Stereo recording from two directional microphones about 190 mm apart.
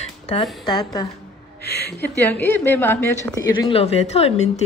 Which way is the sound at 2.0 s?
10° left (ahead or behind).